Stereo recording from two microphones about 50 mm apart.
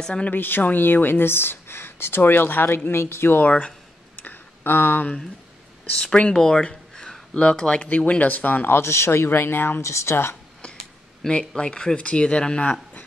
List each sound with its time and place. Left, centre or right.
0.0 s speech: centre
0.3 s speech: left
4.2 s a sound: left
6.3 s speech: centre; by 9.8 s left
9.8 s speech: left
11.2 s speech: centre